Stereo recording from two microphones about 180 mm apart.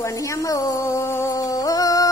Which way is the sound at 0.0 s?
20° left (ahead or behind).